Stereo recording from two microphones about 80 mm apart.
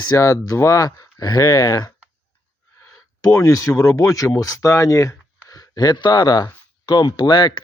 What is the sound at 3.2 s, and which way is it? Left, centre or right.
Speech, left.